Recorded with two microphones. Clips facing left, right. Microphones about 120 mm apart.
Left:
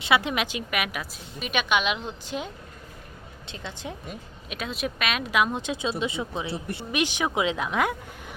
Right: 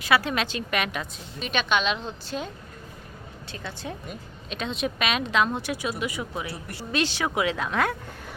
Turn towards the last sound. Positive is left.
turn(degrees=15)  # may be behind; listen again after turning